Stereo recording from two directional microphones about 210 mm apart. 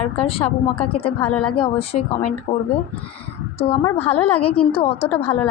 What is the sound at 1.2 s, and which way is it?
Speech, 5° left (ahead or behind).